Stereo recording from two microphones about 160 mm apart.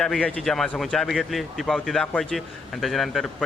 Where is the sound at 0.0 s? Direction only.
5° left (ahead or behind).